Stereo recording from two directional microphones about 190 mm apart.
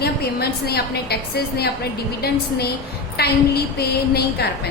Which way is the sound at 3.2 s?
55° left (ahead or behind).